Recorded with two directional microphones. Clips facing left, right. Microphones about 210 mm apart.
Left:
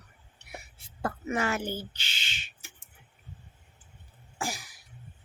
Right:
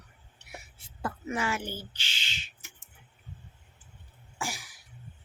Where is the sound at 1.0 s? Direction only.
50° left (ahead or behind).